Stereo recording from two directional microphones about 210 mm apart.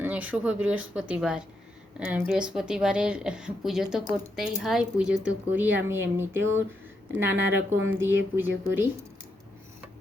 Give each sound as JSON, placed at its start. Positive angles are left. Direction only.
{"t": 0.0, "sound": "a woman's voice", "side_deg": -5}